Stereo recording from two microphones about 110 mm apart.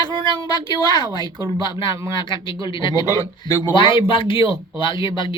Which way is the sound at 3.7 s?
50° left (ahead or behind).